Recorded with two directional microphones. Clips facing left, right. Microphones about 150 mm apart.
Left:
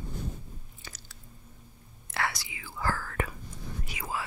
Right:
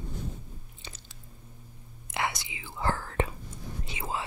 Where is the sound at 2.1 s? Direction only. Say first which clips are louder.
Right 1 dB; 20° right (ahead or behind).